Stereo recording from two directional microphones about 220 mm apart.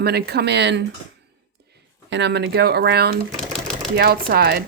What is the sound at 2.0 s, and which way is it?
Speech, 55° right (ahead or behind).